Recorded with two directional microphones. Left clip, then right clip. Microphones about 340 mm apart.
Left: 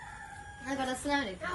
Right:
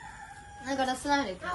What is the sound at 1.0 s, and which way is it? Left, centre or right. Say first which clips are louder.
Speech: right 2 dB; centre.